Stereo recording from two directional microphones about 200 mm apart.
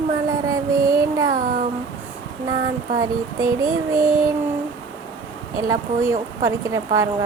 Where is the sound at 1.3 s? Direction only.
40° right (ahead or behind).